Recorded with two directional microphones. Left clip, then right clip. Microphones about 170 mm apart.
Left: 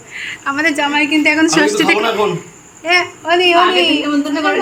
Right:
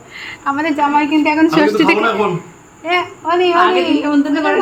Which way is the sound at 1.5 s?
10° right (ahead or behind).